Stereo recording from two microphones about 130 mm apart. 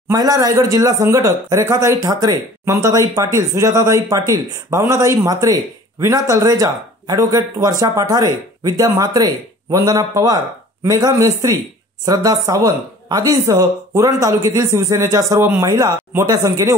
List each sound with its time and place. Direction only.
0.1 s a man's voice: 25° right (ahead or behind)